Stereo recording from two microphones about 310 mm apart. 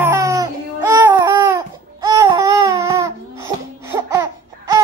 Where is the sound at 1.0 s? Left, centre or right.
Centre.